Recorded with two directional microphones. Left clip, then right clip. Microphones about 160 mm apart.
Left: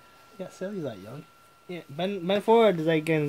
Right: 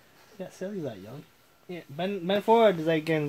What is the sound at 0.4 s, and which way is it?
Speech, 20° left (ahead or behind).